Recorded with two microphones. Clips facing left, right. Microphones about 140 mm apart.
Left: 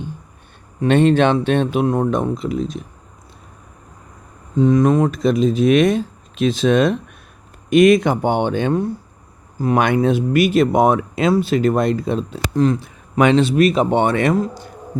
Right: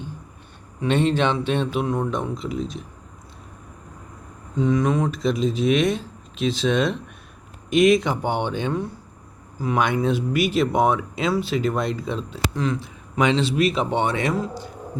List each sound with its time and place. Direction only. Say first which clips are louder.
0.8 s speech: left 7 dB; 55° left (ahead or behind)
4.6 s speech: left 6 dB; 45° left (ahead or behind)